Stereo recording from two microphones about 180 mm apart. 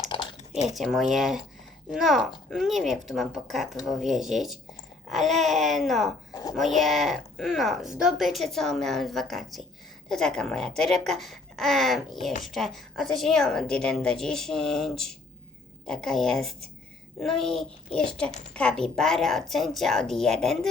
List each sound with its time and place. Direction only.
0.1 s a sound: 30° left (ahead or behind)
0.8 s speech: centre (ahead or behind)
6.3 s a sound: 20° left (ahead or behind)
6.6 s speech: centre (ahead or behind)
18.3 s a woman's voice: 40° left (ahead or behind)
18.5 s speech: 5° left (ahead or behind)